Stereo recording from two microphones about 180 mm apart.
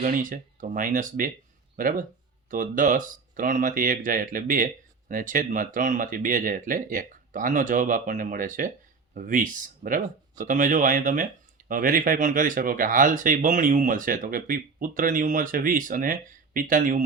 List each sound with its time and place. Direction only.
0.0 s speech: 45° right (ahead or behind)